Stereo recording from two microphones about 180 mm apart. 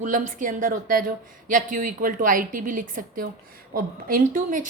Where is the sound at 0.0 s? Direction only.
45° right (ahead or behind).